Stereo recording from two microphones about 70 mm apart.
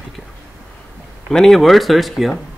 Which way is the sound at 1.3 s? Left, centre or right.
Centre.